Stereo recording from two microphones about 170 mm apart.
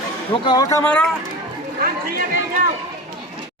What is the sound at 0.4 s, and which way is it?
Speech, 25° left (ahead or behind).